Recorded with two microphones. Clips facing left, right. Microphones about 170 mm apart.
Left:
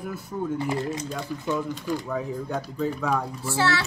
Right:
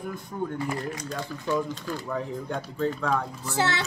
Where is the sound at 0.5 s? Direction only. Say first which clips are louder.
Left 3 dB; 25° left (ahead or behind).